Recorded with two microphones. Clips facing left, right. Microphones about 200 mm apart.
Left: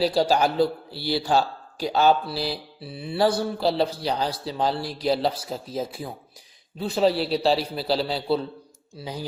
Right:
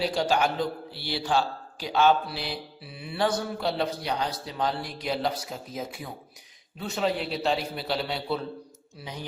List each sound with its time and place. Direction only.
0.0 s a man's voice: 35° left (ahead or behind)